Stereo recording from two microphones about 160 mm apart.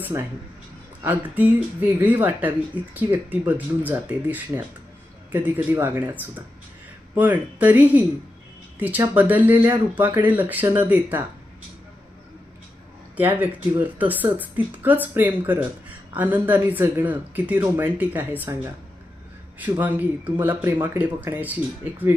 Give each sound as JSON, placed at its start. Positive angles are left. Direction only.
{"t": 0.1, "sound": "speech", "side_deg": -20}
{"t": 13.1, "sound": "speech", "side_deg": -10}
{"t": 19.8, "sound": "speech", "side_deg": -10}